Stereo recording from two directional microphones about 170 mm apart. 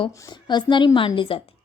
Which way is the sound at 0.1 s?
20° left (ahead or behind).